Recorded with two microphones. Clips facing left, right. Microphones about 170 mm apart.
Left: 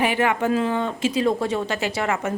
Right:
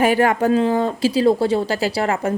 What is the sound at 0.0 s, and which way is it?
Speech, 40° right (ahead or behind).